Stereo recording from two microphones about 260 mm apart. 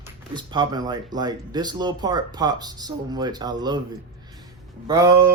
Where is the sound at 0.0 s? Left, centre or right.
Centre.